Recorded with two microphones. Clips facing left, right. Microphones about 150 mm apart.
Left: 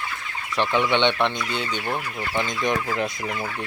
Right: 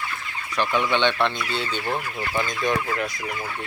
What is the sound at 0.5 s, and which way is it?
Chicken, 25° left (ahead or behind).